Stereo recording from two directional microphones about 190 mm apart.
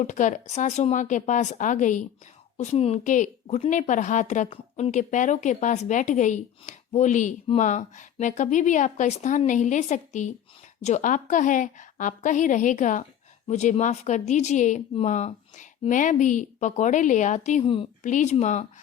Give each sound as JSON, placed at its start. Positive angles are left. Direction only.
{"t": 0.0, "sound": "a woman's voice", "side_deg": 40}
{"t": 17.6, "sound": "a woman's voice", "side_deg": 25}
{"t": 18.0, "sound": "a woman's voice", "side_deg": 40}